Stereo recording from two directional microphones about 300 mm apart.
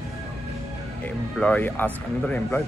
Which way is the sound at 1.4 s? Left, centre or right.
Centre.